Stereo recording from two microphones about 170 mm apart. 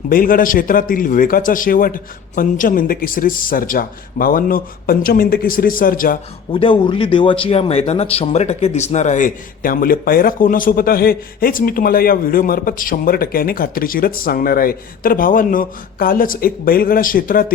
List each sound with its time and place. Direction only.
0.1 s speech: 55° left (ahead or behind)
6.5 s speech: 30° left (ahead or behind); by 17.4 s 55° left (ahead or behind)